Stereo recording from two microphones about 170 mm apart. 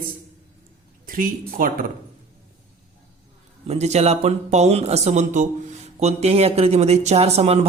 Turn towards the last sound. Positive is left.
turn(degrees=-35)  # may be behind; listen again after turning